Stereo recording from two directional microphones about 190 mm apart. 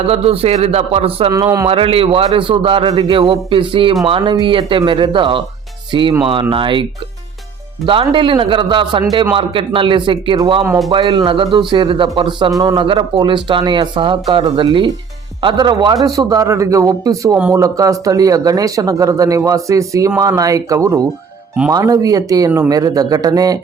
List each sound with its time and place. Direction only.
0.1 s a man's voice: 30° right (ahead or behind)
1.3 s speech: 15° right (ahead or behind)
1.6 s speech: 30° right (ahead or behind)
7.9 s speech: 25° right (ahead or behind)